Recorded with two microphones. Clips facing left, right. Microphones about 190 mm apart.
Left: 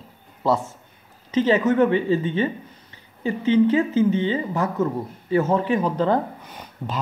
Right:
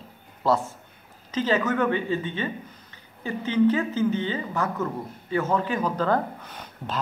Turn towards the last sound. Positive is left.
turn(degrees=15)  # may be behind; listen again after turning